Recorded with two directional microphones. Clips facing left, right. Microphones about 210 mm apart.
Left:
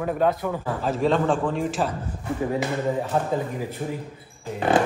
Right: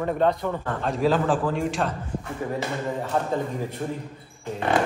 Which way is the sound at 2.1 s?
40° left (ahead or behind).